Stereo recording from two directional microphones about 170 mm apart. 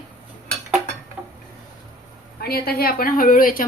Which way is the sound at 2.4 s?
65° left (ahead or behind).